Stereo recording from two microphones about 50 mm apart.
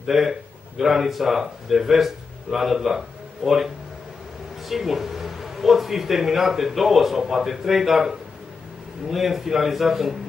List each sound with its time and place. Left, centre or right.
0.0 s a man's voice: centre